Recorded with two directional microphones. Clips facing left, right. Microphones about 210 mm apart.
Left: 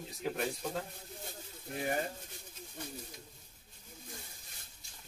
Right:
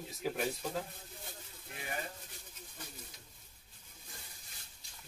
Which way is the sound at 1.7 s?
45° left (ahead or behind).